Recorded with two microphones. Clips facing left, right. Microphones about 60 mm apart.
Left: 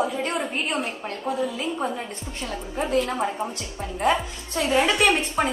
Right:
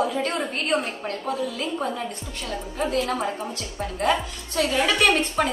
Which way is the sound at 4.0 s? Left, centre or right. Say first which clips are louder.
Left 1 dB; left.